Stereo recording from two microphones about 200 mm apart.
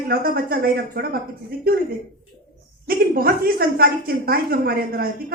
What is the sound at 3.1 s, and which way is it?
A woman's voice, 50° right (ahead or behind).